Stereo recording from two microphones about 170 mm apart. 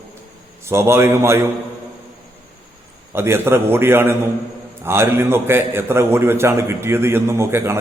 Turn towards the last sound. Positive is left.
turn(degrees=-15)  # may be behind; listen again after turning